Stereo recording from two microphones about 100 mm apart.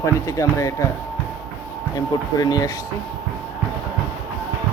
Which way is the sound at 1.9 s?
40° left (ahead or behind).